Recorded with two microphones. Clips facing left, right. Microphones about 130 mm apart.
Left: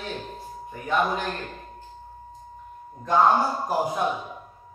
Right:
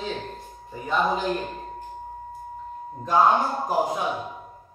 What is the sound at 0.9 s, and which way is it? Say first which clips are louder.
Speech: even; 5° left (ahead or behind).